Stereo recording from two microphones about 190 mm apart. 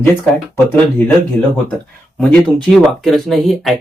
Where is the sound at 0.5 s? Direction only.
10° left (ahead or behind).